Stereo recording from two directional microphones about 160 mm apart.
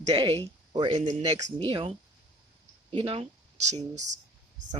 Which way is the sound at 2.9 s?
35° right (ahead or behind).